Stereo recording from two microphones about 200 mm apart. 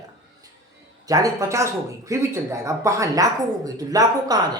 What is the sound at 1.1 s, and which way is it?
Speech, 15° right (ahead or behind).